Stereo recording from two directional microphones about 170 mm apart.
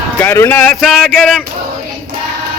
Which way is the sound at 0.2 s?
10° left (ahead or behind).